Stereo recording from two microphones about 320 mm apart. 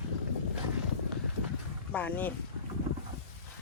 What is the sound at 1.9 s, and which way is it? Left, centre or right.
Speech, centre.